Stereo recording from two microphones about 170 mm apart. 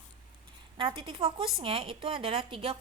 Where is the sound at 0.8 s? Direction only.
30° right (ahead or behind).